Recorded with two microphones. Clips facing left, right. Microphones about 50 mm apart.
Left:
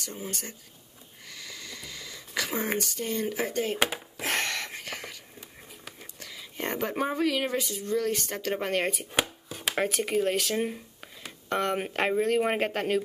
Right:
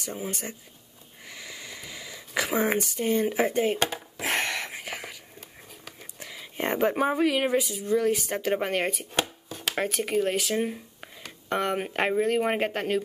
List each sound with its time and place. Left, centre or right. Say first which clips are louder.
0.0 s speech: right 4 dB; centre
1.3 s sniff: right 2 dB; centre
2.5 s speech: right 6 dB; centre
4.2 s a sound: right 2 dB; centre
6.1 s speech: right 5 dB; centre
9.1 s speech: even; centre